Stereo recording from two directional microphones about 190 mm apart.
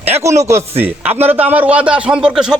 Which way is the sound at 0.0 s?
15° right (ahead or behind).